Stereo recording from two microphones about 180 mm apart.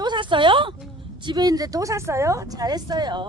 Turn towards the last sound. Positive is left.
turn(degrees=-25)  # may be behind; listen again after turning